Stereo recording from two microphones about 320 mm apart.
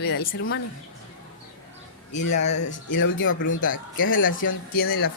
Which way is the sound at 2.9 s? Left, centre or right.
Left.